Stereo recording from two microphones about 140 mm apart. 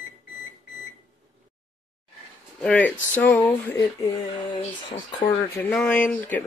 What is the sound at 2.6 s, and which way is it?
Speech, 10° left (ahead or behind).